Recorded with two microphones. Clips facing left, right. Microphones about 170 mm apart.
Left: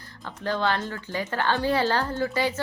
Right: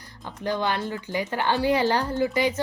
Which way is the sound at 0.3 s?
15° right (ahead or behind).